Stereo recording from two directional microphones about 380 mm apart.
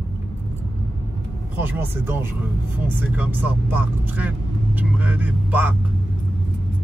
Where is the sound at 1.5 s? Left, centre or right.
Centre.